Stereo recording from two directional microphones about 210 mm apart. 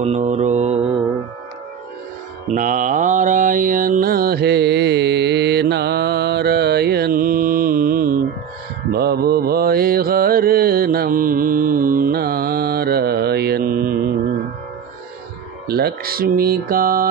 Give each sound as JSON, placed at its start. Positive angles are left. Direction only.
{"t": 0.0, "sound": "mantra", "side_deg": -30}
{"t": 2.4, "sound": "mantra", "side_deg": -40}
{"t": 15.6, "sound": "speech", "side_deg": -50}